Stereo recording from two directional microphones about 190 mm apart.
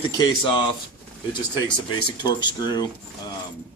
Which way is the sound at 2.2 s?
20° left (ahead or behind).